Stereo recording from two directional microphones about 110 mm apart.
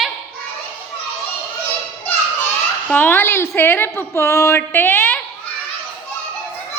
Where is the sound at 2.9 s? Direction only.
15° left (ahead or behind).